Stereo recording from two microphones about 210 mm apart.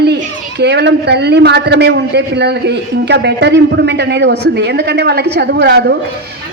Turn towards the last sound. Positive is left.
turn(degrees=-50)  # may be behind; listen again after turning